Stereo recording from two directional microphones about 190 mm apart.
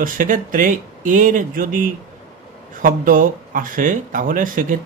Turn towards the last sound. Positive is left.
turn(degrees=-45)  # may be behind; listen again after turning